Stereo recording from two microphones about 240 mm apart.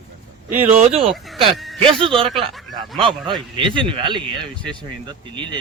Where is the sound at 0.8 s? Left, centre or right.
Right.